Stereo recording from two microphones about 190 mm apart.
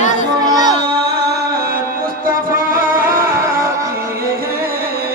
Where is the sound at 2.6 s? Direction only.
50° right (ahead or behind).